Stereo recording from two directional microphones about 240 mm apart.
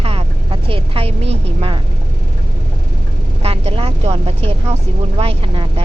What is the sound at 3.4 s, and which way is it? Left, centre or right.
Vehicle, right.